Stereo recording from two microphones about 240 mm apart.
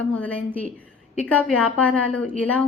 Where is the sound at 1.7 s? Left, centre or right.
Centre.